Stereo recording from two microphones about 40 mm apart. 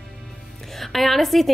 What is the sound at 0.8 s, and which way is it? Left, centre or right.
Speech, centre.